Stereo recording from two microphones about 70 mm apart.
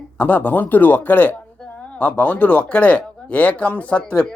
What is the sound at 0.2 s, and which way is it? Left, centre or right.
Speech, left.